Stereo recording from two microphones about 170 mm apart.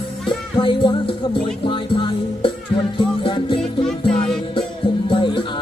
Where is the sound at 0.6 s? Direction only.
30° left (ahead or behind).